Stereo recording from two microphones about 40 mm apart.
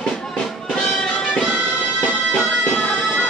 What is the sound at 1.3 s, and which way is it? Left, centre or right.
Music, centre.